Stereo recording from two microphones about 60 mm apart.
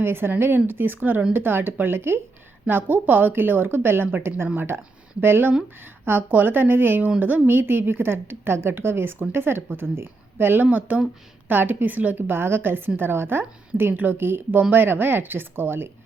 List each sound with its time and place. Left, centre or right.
0.0 s speech: right
10.7 s speech: right
13.9 s a woman's voice: right